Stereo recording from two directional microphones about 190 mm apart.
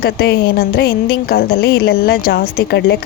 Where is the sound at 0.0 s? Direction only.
55° left (ahead or behind).